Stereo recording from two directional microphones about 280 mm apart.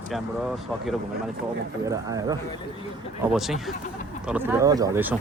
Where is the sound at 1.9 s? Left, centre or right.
Centre.